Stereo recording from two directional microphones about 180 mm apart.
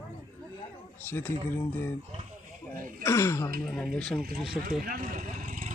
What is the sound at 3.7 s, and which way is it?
Speech, 5° left (ahead or behind).